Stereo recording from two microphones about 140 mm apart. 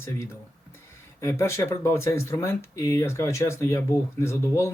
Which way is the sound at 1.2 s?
20° left (ahead or behind).